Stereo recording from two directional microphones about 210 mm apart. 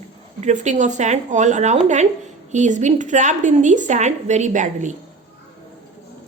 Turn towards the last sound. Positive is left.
turn(degrees=-35)  # may be behind; listen again after turning